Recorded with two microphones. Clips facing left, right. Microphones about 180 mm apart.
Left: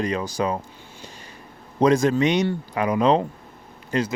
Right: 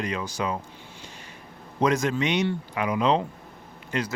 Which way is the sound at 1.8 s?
35° left (ahead or behind).